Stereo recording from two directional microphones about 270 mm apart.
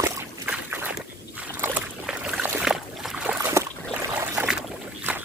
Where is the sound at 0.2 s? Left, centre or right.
Centre.